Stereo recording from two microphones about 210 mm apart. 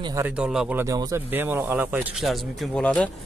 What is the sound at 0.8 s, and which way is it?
Speech, 15° right (ahead or behind).